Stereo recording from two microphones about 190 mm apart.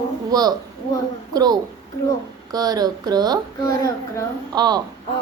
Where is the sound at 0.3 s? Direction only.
20° right (ahead or behind).